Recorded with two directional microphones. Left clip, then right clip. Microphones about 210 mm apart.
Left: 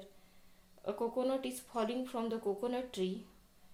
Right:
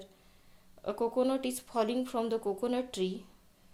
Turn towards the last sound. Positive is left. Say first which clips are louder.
# right 4 dB
turn(degrees=-45)  # may be behind; listen again after turning